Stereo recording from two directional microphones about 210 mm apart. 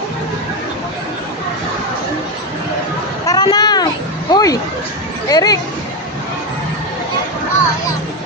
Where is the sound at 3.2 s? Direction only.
20° left (ahead or behind).